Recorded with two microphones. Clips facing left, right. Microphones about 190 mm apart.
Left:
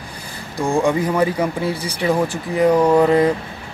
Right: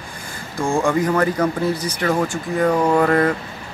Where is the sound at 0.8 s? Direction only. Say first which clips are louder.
Left 1 dB; 15° left (ahead or behind).